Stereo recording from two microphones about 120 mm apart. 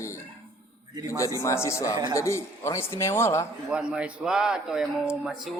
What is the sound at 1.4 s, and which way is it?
A man's voice, 25° left (ahead or behind).